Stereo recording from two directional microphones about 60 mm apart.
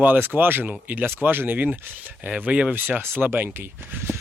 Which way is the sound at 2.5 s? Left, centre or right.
Centre.